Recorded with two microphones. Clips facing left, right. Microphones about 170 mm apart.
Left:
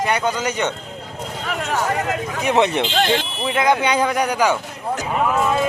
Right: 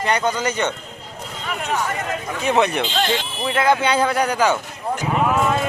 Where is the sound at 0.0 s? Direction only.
10° left (ahead or behind).